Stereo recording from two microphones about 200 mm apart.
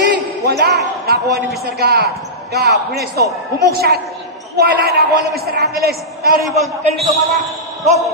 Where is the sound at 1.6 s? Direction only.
50° right (ahead or behind).